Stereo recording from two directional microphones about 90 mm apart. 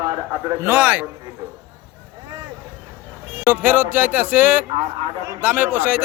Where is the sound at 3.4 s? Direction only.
20° right (ahead or behind).